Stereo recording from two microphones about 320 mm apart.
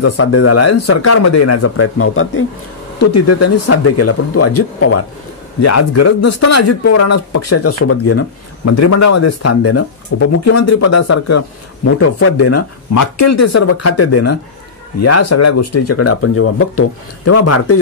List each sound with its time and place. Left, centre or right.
0.0 s speech: left